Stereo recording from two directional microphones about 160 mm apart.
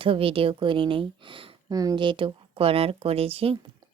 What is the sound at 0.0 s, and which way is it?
Speech, 35° right (ahead or behind).